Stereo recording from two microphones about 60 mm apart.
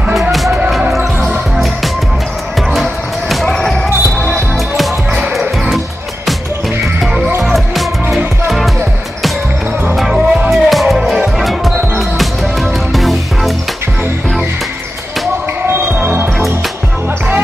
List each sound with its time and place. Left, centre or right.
0.1 s music: centre
2.7 s music: centre
3.4 s basketball bounce: centre
4.3 s music: centre
7.5 s music: centre
9.9 s music: centre
12.9 s music: centre
16.0 s music: right